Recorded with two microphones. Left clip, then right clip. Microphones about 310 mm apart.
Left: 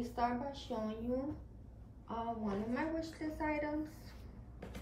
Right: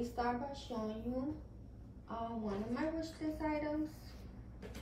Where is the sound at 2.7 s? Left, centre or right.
Centre.